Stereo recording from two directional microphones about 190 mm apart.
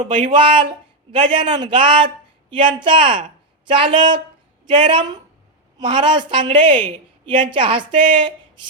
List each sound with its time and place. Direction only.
0.2 s a woman's voice: 25° right (ahead or behind)